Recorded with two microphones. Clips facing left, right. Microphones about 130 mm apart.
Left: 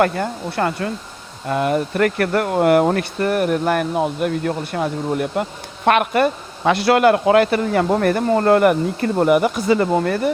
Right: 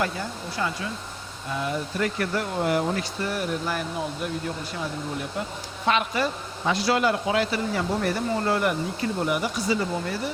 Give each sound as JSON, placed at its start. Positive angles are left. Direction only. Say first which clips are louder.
{"t": 0.0, "sound": "speech", "louder": "left 10 dB", "side_deg": 60}